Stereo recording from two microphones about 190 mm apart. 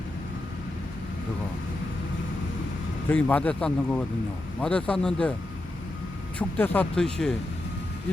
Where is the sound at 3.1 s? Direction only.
10° left (ahead or behind).